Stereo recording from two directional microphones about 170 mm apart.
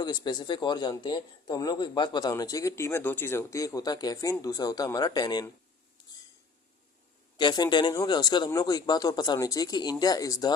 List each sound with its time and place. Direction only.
0.0 s a man's voice: 25° left (ahead or behind)
7.3 s a man's voice: 25° left (ahead or behind)